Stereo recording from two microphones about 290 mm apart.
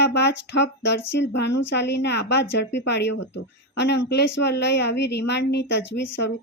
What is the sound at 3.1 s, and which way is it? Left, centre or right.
Speech, left.